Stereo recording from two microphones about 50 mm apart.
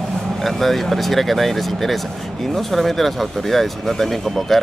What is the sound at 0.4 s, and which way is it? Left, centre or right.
Speech, centre.